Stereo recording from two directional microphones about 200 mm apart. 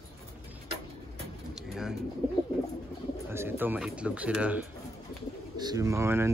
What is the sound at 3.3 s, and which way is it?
Speech, 10° right (ahead or behind).